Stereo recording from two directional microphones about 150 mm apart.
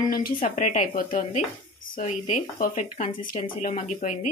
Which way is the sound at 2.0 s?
50° left (ahead or behind).